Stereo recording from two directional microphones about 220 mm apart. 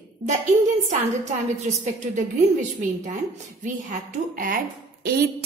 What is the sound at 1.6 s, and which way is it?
Speech, 35° right (ahead or behind).